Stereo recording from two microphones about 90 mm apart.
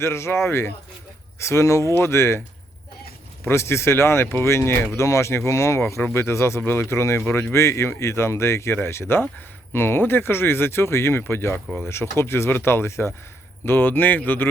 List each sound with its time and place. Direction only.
0.0 s speech: 30° left (ahead or behind)
3.4 s speech: 30° left (ahead or behind)